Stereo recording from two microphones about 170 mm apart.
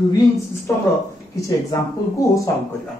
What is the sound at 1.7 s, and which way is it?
Speech, 20° left (ahead or behind).